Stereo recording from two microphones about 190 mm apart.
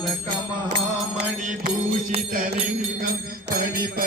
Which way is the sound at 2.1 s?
45° right (ahead or behind).